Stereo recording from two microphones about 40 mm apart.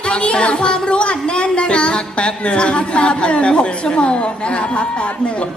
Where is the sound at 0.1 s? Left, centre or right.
Left.